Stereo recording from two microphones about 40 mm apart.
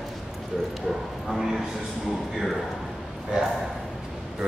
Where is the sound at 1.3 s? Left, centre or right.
Centre.